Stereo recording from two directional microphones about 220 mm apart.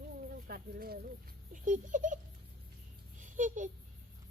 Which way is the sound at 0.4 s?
40° right (ahead or behind).